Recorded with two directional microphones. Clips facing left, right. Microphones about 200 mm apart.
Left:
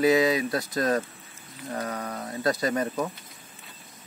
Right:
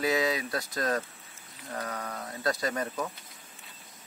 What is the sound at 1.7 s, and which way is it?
Speech, 20° left (ahead or behind).